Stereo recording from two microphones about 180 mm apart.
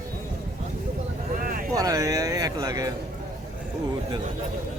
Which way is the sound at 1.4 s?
50° right (ahead or behind).